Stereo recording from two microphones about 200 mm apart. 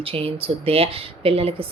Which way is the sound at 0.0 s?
25° right (ahead or behind).